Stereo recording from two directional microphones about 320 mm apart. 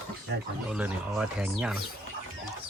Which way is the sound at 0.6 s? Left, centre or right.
Centre.